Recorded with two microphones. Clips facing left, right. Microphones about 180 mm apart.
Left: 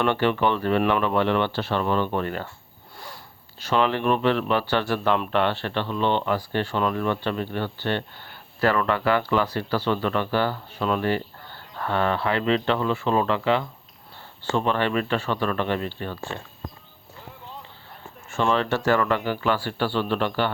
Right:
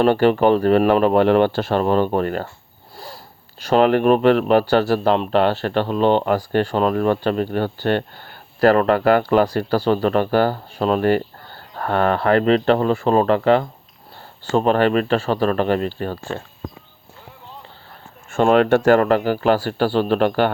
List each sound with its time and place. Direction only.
0.0 s speech: 40° right (ahead or behind)
3.7 s speech: 45° right (ahead or behind)
18.3 s speech: 50° right (ahead or behind)